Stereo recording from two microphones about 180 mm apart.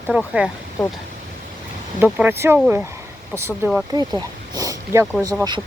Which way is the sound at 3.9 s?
20° right (ahead or behind).